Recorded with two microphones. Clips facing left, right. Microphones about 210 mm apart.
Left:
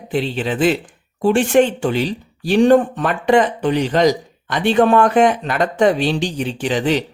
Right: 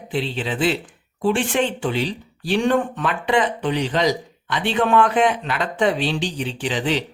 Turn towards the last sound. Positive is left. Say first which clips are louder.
# left 5 dB
turn(degrees=45)  # may be behind; listen again after turning